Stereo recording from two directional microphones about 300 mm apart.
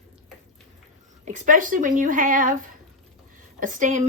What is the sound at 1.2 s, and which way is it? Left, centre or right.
A woman's voice, right.